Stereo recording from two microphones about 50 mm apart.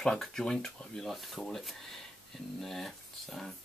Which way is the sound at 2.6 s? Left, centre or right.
Centre.